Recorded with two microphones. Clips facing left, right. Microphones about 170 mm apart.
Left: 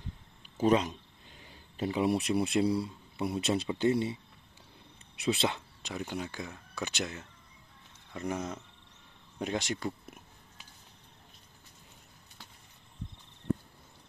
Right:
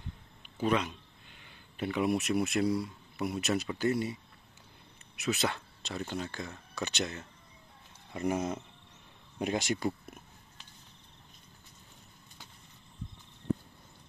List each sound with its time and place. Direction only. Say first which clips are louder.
0.6 s speech: left 4 dB; 40° left (ahead or behind)
5.5 s speech: even; 15° left (ahead or behind)
8.1 s speech: right 4 dB; 10° right (ahead or behind)